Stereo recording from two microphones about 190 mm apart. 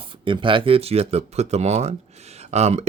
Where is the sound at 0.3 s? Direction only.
25° right (ahead or behind).